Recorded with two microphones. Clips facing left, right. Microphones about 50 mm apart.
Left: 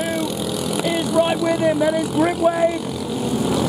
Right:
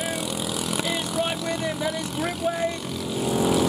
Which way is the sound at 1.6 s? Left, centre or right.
Centre.